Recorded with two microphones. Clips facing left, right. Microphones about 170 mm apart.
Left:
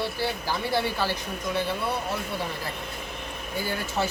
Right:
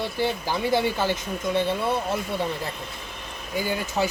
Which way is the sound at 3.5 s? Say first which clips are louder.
Right 3 dB; 15° right (ahead or behind).